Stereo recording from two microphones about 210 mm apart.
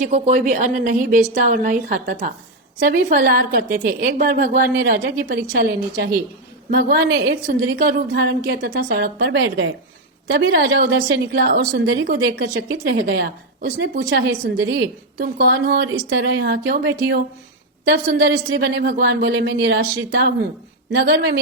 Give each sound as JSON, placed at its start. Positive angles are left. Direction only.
{"t": 0.0, "sound": "a woman's voice", "side_deg": -35}
{"t": 10.2, "sound": "a woman's voice", "side_deg": -50}
{"t": 17.8, "sound": "a woman's voice", "side_deg": -50}